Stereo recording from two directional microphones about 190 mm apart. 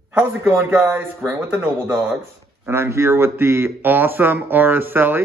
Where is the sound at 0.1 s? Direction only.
10° right (ahead or behind).